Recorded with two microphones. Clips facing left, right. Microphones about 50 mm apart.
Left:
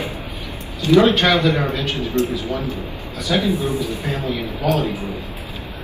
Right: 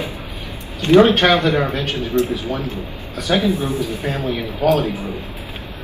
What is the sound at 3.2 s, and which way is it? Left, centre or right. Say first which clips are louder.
A man's voice: right 1 dB; right.